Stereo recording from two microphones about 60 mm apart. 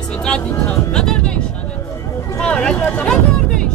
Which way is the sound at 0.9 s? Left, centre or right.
Centre.